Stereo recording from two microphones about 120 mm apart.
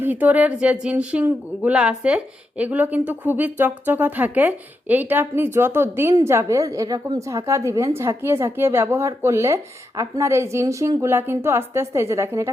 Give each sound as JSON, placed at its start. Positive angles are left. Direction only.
{"t": 0.0, "sound": "speech", "side_deg": -15}